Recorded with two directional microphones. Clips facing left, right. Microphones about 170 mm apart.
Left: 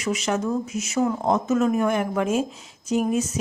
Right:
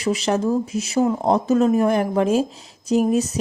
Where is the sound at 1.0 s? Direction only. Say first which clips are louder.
Right 3 dB; 20° right (ahead or behind).